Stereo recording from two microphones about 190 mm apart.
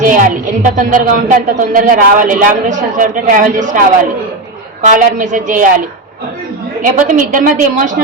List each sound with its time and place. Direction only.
0.0 s speech: 45° right (ahead or behind)
6.8 s speech: 45° right (ahead or behind)